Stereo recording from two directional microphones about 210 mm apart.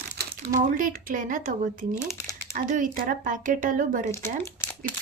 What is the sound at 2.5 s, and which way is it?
A woman's voice, 40° right (ahead or behind).